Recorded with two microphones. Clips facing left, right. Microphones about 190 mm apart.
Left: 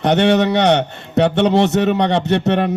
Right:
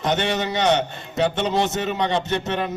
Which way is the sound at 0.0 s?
70° left (ahead or behind).